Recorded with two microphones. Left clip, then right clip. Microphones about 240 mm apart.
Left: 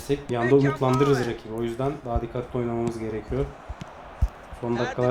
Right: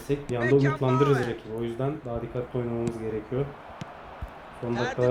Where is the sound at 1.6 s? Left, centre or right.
Left.